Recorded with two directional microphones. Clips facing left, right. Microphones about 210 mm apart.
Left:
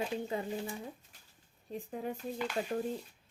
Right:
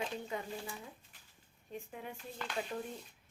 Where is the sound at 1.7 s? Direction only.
40° left (ahead or behind).